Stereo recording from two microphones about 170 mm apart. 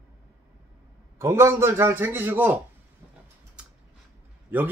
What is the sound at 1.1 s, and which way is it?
A man's voice, 15° right (ahead or behind).